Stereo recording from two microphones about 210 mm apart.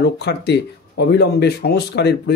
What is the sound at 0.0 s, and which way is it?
Speech, 50° left (ahead or behind).